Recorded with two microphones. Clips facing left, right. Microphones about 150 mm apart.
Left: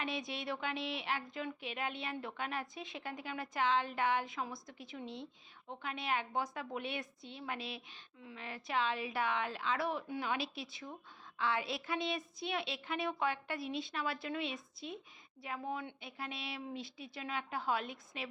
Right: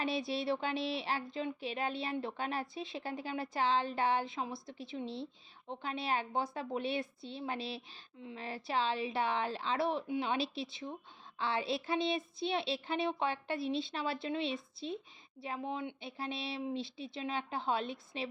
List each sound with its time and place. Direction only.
0.0 s child singing: 30° right (ahead or behind)
10.1 s speech: 25° right (ahead or behind)